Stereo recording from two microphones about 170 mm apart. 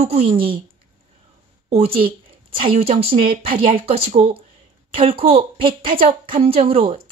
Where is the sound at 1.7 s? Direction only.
35° right (ahead or behind).